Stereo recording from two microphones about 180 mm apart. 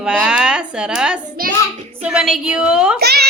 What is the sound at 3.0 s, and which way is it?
Speech, 65° right (ahead or behind).